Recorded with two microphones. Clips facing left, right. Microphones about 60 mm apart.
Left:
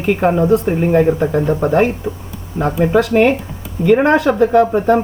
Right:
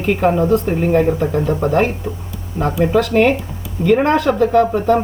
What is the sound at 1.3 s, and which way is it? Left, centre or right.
Speech, left.